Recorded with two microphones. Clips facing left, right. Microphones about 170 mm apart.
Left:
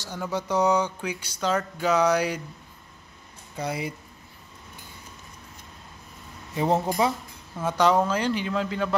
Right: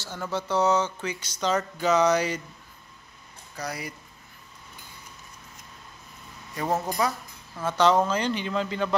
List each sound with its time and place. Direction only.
0.0 s speech: 15° left (ahead or behind)
3.5 s speech: 25° left (ahead or behind)
6.5 s speech: 20° left (ahead or behind)
7.7 s speech: 10° left (ahead or behind)